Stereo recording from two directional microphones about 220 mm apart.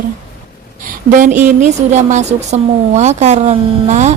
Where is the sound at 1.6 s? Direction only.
35° right (ahead or behind).